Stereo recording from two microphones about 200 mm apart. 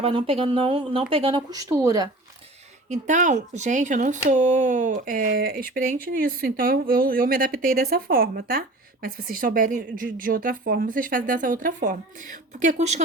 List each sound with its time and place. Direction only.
0.0 s speech: 25° right (ahead or behind)
2.9 s speech: 40° right (ahead or behind)